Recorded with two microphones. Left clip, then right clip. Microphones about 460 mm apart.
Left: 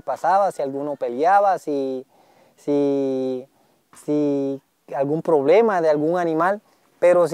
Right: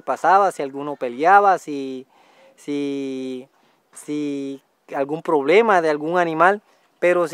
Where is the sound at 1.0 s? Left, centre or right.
Left.